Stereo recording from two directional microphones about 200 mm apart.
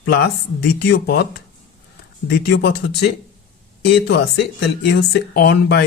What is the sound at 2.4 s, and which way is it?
Speech, 55° left (ahead or behind).